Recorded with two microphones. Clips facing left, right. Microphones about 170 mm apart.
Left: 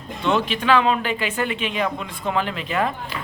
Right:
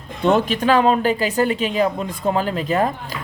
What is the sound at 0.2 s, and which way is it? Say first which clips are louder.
Speech: right 5 dB; 45° right (ahead or behind).